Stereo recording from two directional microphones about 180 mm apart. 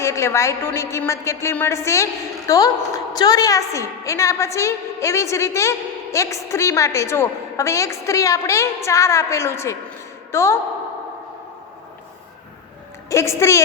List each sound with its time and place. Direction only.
0.0 s a woman's voice: 15° left (ahead or behind)
13.1 s a woman's voice: 15° left (ahead or behind)